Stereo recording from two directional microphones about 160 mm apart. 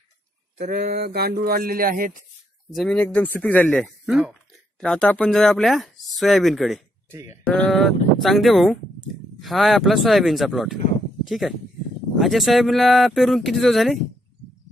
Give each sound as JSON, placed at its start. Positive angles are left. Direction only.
{"t": 0.6, "sound": "speech", "side_deg": -75}
{"t": 2.7, "sound": "speech", "side_deg": 5}
{"t": 4.0, "sound": "speech", "side_deg": -5}
{"t": 7.1, "sound": "speech", "side_deg": -20}
{"t": 7.4, "sound": "speech", "side_deg": 5}